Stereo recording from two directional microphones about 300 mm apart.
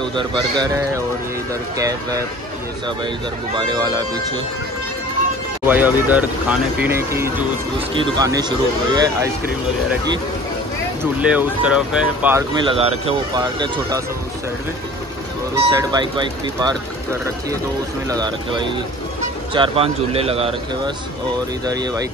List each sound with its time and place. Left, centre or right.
0.2 s speech: centre
3.5 s speech: centre
5.7 s speech: centre
11.1 s speech: centre
15.5 s speech: centre
18.0 s a man's voice: centre